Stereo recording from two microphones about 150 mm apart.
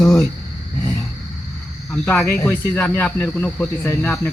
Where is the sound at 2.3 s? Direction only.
15° left (ahead or behind).